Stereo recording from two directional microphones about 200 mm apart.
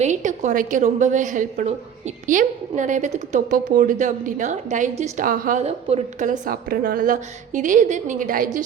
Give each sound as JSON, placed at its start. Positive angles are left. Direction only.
{"t": 0.0, "sound": "a woman's voice", "side_deg": -35}